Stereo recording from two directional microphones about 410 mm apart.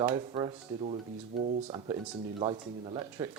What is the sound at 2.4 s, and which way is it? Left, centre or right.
Speech, centre.